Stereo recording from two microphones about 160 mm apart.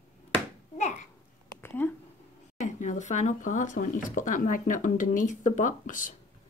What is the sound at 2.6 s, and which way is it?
Speech, 50° left (ahead or behind).